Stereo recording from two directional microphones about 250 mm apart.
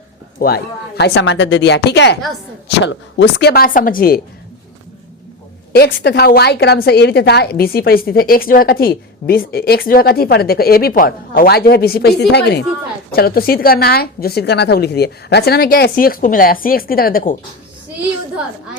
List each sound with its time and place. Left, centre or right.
0.3 s a woman's voice: left
5.7 s a woman's voice: left